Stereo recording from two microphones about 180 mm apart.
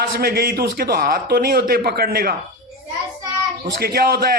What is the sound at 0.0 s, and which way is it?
A man's voice, 60° right (ahead or behind).